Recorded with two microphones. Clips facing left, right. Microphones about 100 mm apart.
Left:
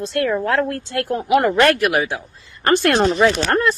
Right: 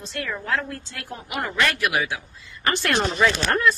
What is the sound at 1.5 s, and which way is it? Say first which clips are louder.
Speech: left 8 dB; 50° left (ahead or behind).